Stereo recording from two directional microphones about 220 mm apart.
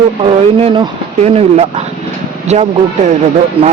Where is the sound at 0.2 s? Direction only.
25° right (ahead or behind).